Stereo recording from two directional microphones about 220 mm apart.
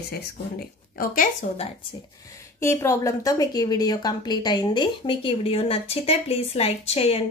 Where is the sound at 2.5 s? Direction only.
15° left (ahead or behind).